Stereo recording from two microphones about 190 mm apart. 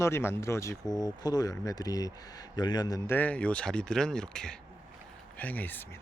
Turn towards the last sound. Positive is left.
turn(degrees=10)  # may be behind; listen again after turning